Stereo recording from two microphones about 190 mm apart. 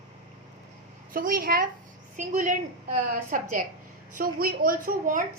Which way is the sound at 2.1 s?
40° right (ahead or behind).